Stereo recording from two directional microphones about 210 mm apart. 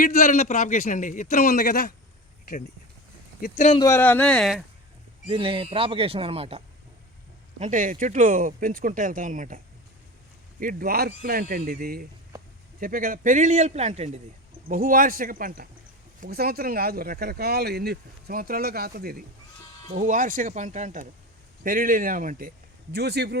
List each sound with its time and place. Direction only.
0.0 s a man's voice: 40° left (ahead or behind)
3.4 s a man's voice: 35° left (ahead or behind)
3.8 s speech: 15° left (ahead or behind)
5.3 s speech: 25° right (ahead or behind)
7.6 s speech: 40° right (ahead or behind)
10.6 s speech: 40° right (ahead or behind)